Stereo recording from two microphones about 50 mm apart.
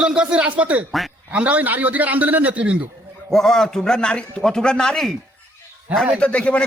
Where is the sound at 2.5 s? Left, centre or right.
Right.